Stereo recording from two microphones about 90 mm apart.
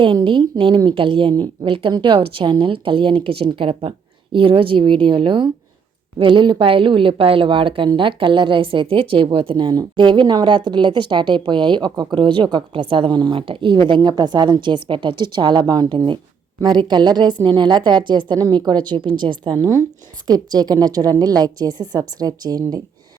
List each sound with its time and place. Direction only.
0.0 s a woman's voice: 70° right (ahead or behind)
13.4 s a woman's voice: 80° right; by 19.5 s 60° right (ahead or behind)
19.5 s speech: 35° right (ahead or behind)
20.2 s a woman's voice: 45° right (ahead or behind)